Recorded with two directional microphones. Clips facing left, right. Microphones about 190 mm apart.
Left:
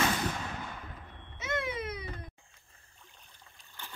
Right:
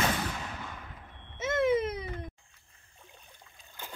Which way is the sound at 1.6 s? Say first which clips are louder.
Right 10 dB; 45° right (ahead or behind).